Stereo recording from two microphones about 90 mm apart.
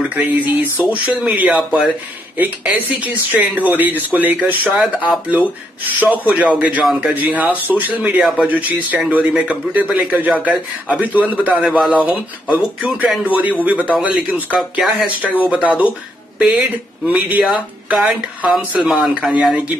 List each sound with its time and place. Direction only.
0.1 s speech: 20° right (ahead or behind)
2.3 s speech: 15° right (ahead or behind)
4.7 s speech: 5° right (ahead or behind)
5.9 s speech: 20° right (ahead or behind)
6.8 s speech: 5° right (ahead or behind)
7.2 s speech: 15° right (ahead or behind)
11.5 s speech: centre (ahead or behind)
12.0 s speech: 15° right (ahead or behind)
14.6 s speech: 5° right (ahead or behind)
18.8 s speech: centre (ahead or behind)